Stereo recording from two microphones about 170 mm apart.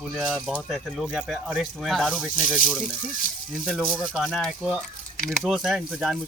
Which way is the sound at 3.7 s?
5° right (ahead or behind).